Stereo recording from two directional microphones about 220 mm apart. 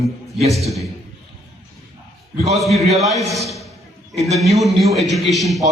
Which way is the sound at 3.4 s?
Centre (ahead or behind).